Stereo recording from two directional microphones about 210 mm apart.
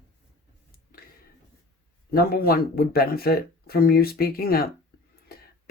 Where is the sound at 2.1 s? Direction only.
45° left (ahead or behind).